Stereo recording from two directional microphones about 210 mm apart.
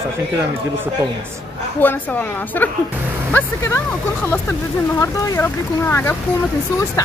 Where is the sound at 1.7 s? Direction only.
10° left (ahead or behind).